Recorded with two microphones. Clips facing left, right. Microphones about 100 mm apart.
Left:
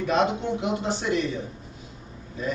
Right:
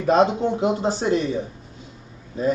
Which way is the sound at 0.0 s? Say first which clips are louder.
Right 6 dB; 35° right (ahead or behind).